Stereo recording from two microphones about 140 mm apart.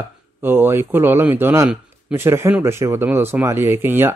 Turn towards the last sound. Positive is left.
turn(degrees=-15)  # may be behind; listen again after turning